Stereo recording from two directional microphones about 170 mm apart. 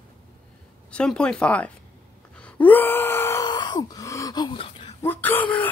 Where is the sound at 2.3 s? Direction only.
10° left (ahead or behind); by 4.9 s 30° left (ahead or behind).